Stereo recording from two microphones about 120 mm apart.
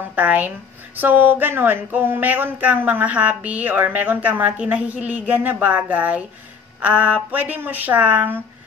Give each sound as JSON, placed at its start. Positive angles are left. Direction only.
{"t": 0.1, "sound": "speech", "side_deg": -15}